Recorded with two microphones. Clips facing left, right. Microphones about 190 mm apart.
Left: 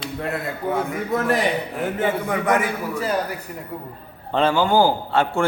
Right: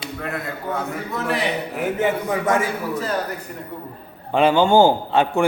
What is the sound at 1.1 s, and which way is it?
Speech, 45° left (ahead or behind).